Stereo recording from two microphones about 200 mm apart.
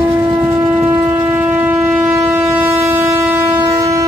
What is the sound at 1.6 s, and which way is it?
Train, 10° right (ahead or behind).